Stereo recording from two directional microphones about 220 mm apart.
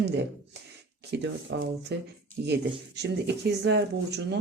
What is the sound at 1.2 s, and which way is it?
Speech, 55° right (ahead or behind).